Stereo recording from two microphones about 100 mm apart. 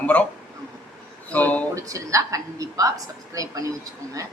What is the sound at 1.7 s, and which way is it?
A woman's voice, 35° right (ahead or behind).